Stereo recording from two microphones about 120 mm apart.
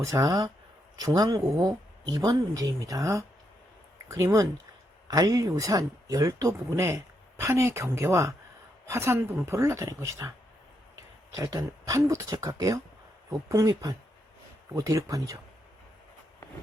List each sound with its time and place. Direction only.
0.0 s speech: 30° right (ahead or behind)
11.3 s speech: 25° right (ahead or behind)